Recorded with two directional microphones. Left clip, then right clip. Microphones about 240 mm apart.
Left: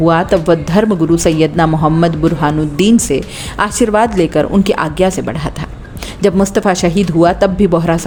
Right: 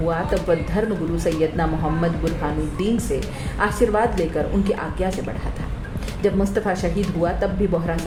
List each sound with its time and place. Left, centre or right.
0.0 s speech: left
6.2 s speech: left